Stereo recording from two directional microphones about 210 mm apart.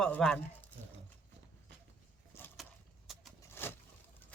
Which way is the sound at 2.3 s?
10° left (ahead or behind).